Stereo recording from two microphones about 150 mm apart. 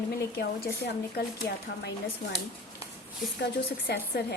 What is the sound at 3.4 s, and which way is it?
Speech, 90° left.